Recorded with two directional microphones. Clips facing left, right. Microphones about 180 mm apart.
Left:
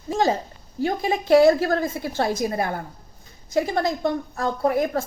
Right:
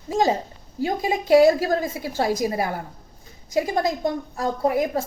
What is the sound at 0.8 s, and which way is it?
A woman's voice, 15° right (ahead or behind).